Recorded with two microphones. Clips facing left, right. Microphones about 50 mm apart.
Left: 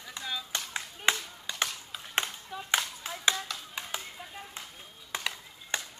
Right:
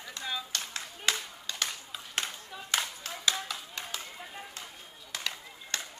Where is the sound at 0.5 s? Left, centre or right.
Left.